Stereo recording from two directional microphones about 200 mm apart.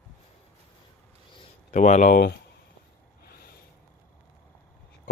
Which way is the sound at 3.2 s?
50° left (ahead or behind).